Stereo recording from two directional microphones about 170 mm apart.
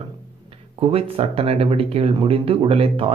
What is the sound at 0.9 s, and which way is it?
Speech, 35° right (ahead or behind).